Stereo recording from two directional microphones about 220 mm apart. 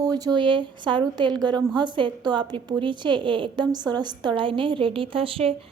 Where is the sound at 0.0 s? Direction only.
20° right (ahead or behind).